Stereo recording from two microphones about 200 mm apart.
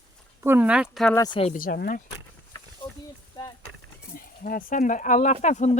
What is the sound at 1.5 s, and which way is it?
Speech, 45° left (ahead or behind).